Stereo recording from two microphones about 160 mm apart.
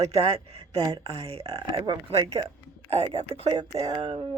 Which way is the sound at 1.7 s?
20° right (ahead or behind).